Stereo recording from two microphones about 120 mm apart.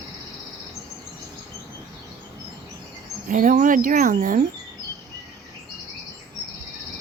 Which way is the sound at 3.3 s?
90° right.